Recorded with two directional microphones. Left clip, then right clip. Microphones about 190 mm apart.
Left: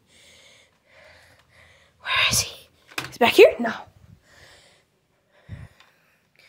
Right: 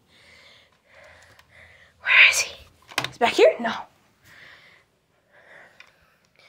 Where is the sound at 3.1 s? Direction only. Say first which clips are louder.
Left 3 dB; 50° left (ahead or behind).